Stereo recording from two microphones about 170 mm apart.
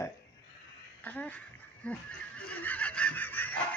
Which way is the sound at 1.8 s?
10° left (ahead or behind).